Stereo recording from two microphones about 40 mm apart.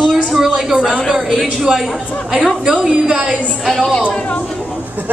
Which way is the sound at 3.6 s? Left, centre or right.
Centre.